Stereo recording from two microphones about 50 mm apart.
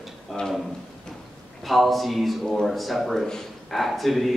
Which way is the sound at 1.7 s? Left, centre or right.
Centre.